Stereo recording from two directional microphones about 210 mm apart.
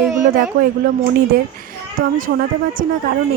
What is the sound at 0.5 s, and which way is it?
Speech, 45° right (ahead or behind).